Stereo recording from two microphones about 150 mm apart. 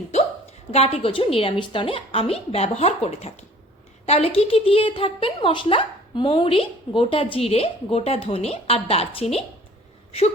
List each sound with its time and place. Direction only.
0.7 s a woman's voice: 40° left (ahead or behind)